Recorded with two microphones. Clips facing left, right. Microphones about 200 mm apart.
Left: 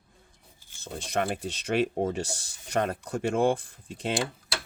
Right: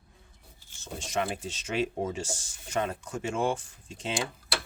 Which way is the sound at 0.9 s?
55° left (ahead or behind).